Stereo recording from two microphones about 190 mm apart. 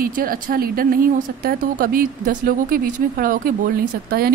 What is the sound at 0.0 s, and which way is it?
Speech, 50° right (ahead or behind).